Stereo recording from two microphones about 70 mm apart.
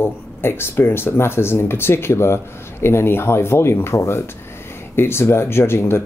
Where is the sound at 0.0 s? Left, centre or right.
Left.